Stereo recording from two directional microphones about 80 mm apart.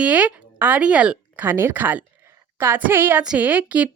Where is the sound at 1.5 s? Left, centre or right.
Right.